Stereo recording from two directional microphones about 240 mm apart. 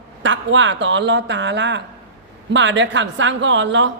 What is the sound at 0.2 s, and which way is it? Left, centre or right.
A man's voice, right.